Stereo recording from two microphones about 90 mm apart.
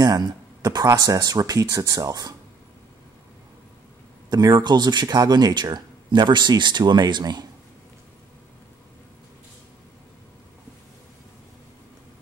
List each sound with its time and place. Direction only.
0.0 s speech: 50° right (ahead or behind)
4.3 s speech: 45° right (ahead or behind)